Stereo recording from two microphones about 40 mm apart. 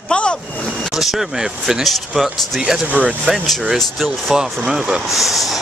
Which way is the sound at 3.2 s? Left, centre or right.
Centre.